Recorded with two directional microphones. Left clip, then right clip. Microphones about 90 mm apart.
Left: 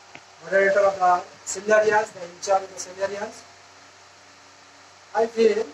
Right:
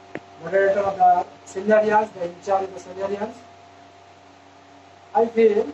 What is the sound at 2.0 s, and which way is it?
Speech, 30° right (ahead or behind).